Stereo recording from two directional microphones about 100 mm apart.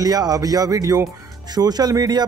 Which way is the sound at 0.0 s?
40° right (ahead or behind).